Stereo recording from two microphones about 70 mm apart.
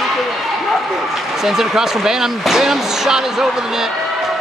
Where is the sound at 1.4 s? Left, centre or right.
Centre.